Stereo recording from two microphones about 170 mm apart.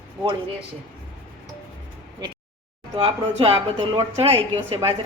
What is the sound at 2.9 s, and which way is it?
A woman's voice, 35° right (ahead or behind).